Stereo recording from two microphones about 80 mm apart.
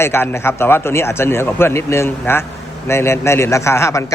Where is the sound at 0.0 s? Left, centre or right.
Left.